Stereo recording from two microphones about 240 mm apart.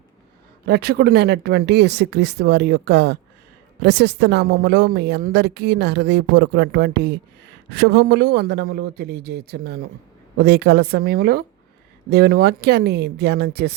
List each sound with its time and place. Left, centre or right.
0.6 s a woman's voice: right